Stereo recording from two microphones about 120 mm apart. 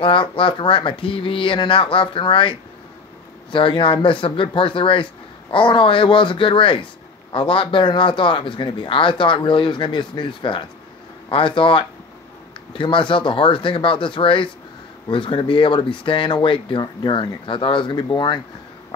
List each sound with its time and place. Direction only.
0.0 s speech: 45° left (ahead or behind)
3.5 s speech: 45° left (ahead or behind)